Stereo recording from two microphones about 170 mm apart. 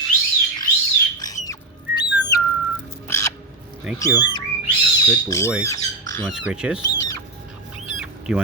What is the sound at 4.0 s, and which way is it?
Speech, 25° left (ahead or behind).